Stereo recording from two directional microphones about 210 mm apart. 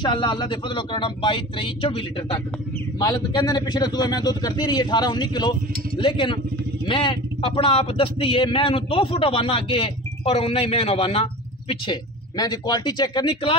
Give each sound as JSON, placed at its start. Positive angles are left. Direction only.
{"t": 0.0, "sound": "speech", "side_deg": 25}